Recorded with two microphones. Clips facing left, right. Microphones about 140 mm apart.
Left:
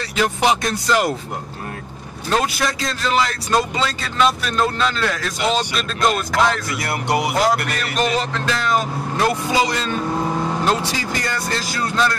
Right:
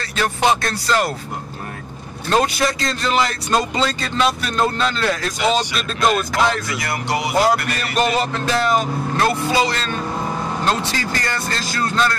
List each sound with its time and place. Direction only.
0.0 s speech: 15° left (ahead or behind)
2.2 s speech: centre (ahead or behind)
6.9 s speech: 60° left (ahead or behind)
7.4 s speech: 5° right (ahead or behind)
9.1 s speech: 15° left (ahead or behind)